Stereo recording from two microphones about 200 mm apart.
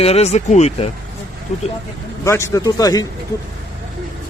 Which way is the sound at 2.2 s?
15° left (ahead or behind).